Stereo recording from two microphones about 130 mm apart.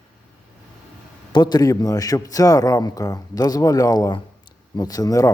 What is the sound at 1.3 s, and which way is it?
A man's voice, 35° left (ahead or behind).